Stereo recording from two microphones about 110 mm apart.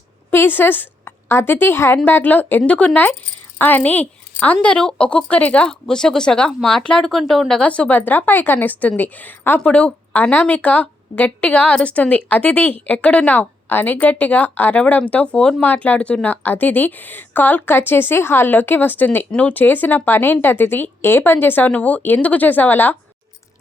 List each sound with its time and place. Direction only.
0.3 s a woman's voice: 20° left (ahead or behind)